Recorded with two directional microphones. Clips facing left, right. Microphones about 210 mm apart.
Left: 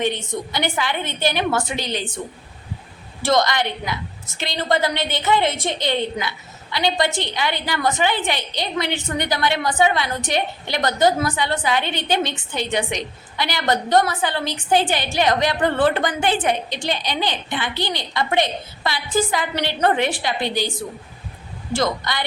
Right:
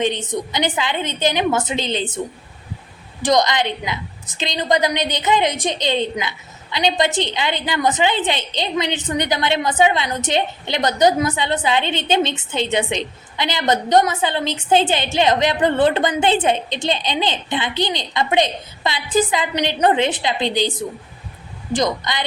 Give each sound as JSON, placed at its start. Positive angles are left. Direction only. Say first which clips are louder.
{"t": 0.0, "sound": "a woman's voice", "louder": "right 2 dB", "side_deg": -20}
{"t": 3.2, "sound": "a woman's voice", "louder": "right 2 dB", "side_deg": -15}